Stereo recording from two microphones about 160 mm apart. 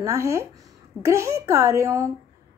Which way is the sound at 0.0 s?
20° right (ahead or behind).